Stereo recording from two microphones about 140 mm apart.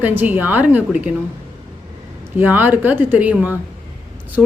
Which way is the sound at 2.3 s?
15° right (ahead or behind).